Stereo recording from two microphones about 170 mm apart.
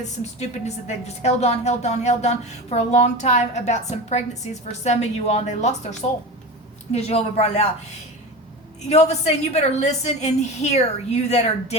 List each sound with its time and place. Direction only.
0.2 s a woman's voice: 40° left (ahead or behind)
8.9 s a woman's voice: 40° left (ahead or behind)